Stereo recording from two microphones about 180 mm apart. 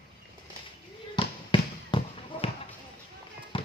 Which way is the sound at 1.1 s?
25° left (ahead or behind).